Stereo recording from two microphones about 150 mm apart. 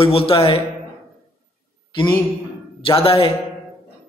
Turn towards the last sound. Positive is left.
turn(degrees=40)  # may be behind; listen again after turning